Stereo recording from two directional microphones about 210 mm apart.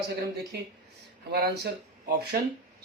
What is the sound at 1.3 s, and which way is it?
Speech, 50° right (ahead or behind).